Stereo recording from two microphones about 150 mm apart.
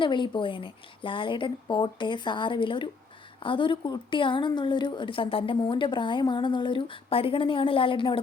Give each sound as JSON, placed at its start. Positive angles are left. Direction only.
{"t": 0.0, "sound": "speech", "side_deg": 30}